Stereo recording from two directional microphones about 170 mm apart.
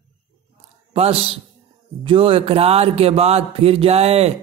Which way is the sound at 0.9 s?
35° right (ahead or behind).